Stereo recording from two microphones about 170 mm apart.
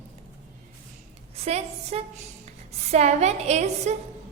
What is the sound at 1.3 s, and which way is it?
A woman's voice, 40° right (ahead or behind).